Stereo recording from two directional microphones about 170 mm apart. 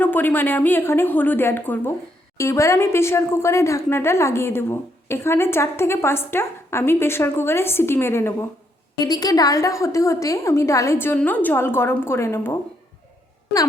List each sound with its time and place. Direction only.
0.0 s a woman's voice: 10° left (ahead or behind)